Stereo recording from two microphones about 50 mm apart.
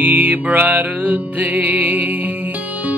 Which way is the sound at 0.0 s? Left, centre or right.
Right.